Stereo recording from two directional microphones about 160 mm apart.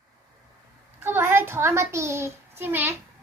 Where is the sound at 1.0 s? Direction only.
15° right (ahead or behind).